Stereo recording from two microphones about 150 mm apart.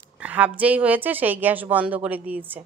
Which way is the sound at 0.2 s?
10° right (ahead or behind).